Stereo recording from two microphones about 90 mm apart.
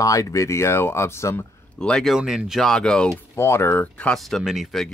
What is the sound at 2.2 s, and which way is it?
Speech, 5° right (ahead or behind).